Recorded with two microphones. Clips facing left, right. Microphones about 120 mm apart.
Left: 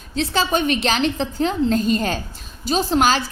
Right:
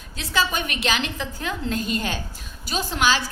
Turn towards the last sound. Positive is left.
turn(degrees=40)  # may be behind; listen again after turning